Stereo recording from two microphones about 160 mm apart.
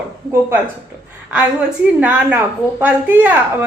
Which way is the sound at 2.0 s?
10° right (ahead or behind).